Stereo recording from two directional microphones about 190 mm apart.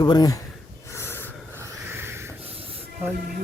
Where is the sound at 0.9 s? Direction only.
15° left (ahead or behind).